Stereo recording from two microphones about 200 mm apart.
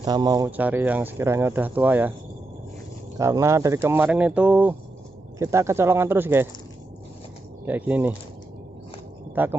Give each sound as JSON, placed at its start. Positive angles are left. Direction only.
{"t": 0.0, "sound": "speech", "side_deg": -20}
{"t": 0.5, "sound": "speech", "side_deg": -10}
{"t": 3.2, "sound": "speech", "side_deg": -15}
{"t": 7.6, "sound": "speech", "side_deg": -10}
{"t": 9.3, "sound": "speech", "side_deg": -10}